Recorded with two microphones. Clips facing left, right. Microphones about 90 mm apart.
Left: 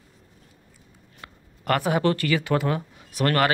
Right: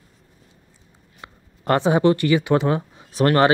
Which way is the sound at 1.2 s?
25° right (ahead or behind).